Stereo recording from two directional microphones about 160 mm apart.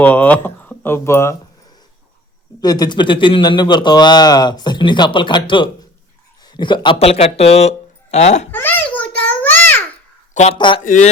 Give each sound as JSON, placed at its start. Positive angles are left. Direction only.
{"t": 0.0, "sound": "speech", "side_deg": 10}
{"t": 2.6, "sound": "speech", "side_deg": 25}
{"t": 8.5, "sound": "a sound", "side_deg": 10}
{"t": 10.3, "sound": "speech", "side_deg": 45}
{"t": 10.8, "sound": "speech", "side_deg": 55}